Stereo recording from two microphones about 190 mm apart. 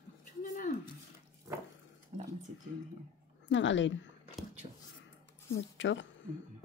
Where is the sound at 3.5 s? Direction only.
75° left (ahead or behind).